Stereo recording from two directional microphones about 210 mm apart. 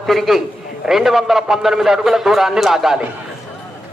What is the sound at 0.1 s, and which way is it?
A man's voice, centre (ahead or behind).